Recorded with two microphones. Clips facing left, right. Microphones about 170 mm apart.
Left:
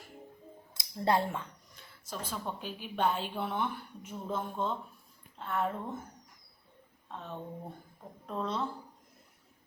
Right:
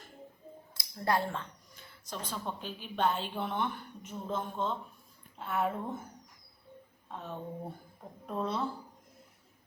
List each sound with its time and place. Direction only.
0.7 s speech: 20° left (ahead or behind)
1.7 s a woman's voice: 5° left (ahead or behind)
5.4 s speech: 5° right (ahead or behind)
7.1 s speech: 5° right (ahead or behind)